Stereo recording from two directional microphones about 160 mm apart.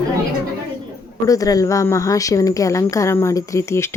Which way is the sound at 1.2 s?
20° left (ahead or behind).